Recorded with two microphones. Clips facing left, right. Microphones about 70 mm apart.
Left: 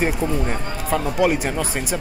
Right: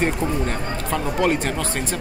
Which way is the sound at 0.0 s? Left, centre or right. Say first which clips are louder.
Even; centre.